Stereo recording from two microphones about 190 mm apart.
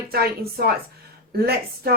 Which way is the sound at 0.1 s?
55° right (ahead or behind).